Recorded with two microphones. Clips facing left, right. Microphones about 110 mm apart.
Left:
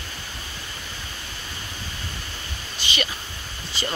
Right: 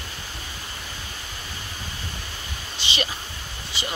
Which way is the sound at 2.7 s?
25° right (ahead or behind).